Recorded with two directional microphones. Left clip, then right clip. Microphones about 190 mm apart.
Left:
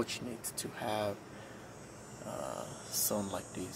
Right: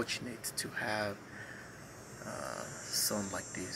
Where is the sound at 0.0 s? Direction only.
10° left (ahead or behind).